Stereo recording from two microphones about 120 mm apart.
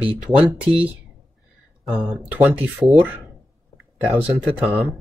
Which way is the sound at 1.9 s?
5° right (ahead or behind).